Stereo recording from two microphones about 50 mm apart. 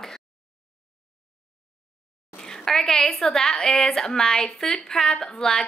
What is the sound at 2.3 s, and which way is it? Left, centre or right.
A woman's voice, centre.